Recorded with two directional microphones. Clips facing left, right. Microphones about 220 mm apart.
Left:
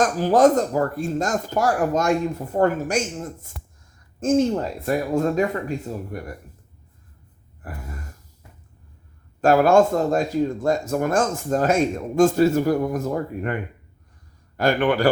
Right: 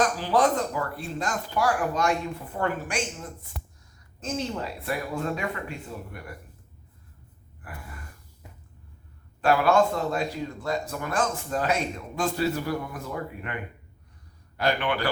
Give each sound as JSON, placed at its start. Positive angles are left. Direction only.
{"t": 0.0, "sound": "speech", "side_deg": 45}
{"t": 7.6, "sound": "gasp", "side_deg": 40}
{"t": 9.4, "sound": "speech", "side_deg": 45}